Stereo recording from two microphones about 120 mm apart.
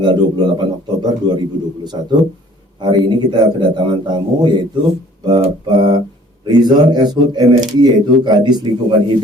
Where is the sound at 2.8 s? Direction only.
40° right (ahead or behind).